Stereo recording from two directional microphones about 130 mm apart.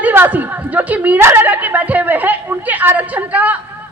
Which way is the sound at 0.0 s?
15° right (ahead or behind).